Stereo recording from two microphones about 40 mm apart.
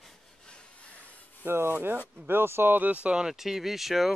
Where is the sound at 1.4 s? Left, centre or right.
Right.